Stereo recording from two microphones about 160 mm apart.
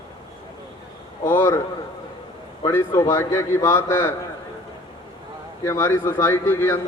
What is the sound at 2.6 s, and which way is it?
A man's voice, 15° left (ahead or behind).